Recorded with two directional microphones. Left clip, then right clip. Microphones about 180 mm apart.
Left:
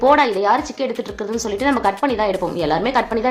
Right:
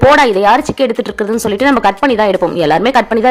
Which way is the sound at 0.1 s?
45° right (ahead or behind).